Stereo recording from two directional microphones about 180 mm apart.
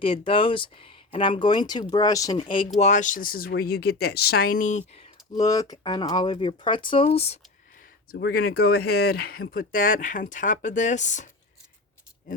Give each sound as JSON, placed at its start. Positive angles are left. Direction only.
{"t": 0.0, "sound": "speech", "side_deg": 30}
{"t": 2.8, "sound": "speech", "side_deg": 45}
{"t": 5.4, "sound": "speech", "side_deg": 20}
{"t": 8.1, "sound": "speech", "side_deg": 60}